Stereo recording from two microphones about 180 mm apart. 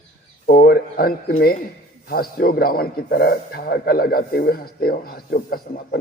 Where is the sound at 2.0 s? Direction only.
55° left (ahead or behind).